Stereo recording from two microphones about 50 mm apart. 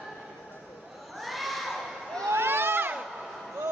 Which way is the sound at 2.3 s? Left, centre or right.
Right.